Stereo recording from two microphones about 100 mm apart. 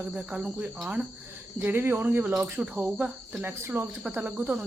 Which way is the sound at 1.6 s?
20° right (ahead or behind).